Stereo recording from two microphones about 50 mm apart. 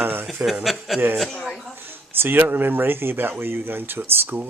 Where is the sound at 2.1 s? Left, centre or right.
Right.